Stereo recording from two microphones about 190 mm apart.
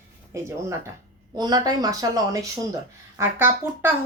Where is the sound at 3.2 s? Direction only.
10° right (ahead or behind).